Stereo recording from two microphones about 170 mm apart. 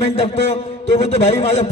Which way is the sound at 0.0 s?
40° left (ahead or behind).